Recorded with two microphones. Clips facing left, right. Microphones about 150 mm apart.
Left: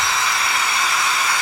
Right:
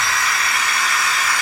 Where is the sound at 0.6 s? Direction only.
90° right.